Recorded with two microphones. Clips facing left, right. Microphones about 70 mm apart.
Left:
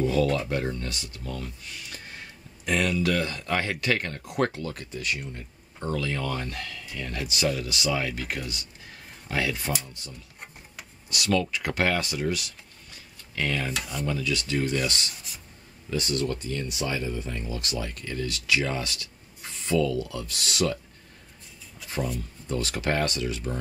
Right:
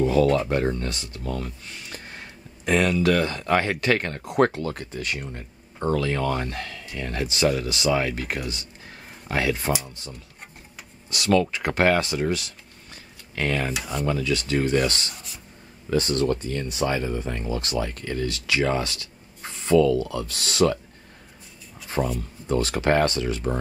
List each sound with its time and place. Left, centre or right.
0.0 s a sound: right
0.5 s speech: right
2.6 s speech: right
11.1 s speech: right
15.1 s writing: centre
15.9 s speech: right
18.3 s speech: right
19.7 s speech: right
20.0 s speech: right
22.0 s speech: right
22.5 s speech: right